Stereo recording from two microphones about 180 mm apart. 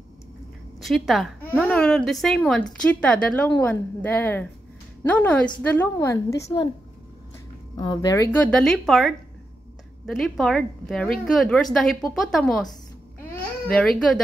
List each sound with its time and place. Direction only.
0.7 s a woman's voice: centre (ahead or behind); by 6.5 s 15° left (ahead or behind)
7.7 s a woman's voice: 20° left (ahead or behind); by 12.7 s centre (ahead or behind)
13.7 s a woman's voice: 5° left (ahead or behind)